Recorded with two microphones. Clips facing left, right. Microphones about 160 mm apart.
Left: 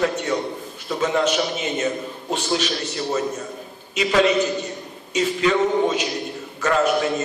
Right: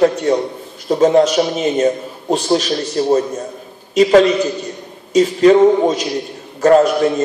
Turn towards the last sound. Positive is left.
turn(degrees=-35)  # may be behind; listen again after turning